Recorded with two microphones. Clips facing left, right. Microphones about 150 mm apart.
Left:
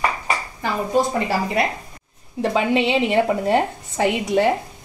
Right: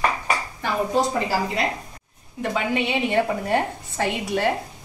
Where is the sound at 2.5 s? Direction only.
25° left (ahead or behind).